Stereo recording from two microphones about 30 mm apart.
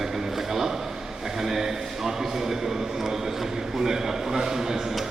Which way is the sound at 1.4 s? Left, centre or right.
Centre.